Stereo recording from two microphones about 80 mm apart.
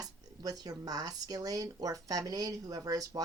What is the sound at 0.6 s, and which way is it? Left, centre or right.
Speech, right.